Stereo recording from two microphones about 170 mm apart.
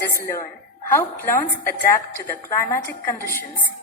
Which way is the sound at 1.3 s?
50° left (ahead or behind).